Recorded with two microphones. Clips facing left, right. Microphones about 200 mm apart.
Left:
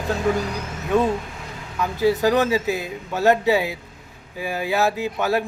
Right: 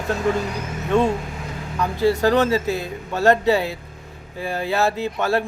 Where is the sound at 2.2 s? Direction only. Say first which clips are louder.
Right 1 dB; 5° left (ahead or behind).